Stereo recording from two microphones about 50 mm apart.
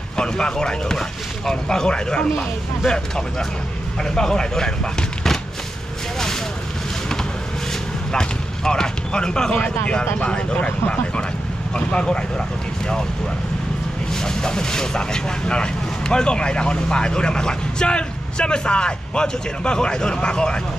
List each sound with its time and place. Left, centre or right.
0.2 s speech: centre
8.1 s a sound: centre
10.1 s speech: left
14.2 s speech: centre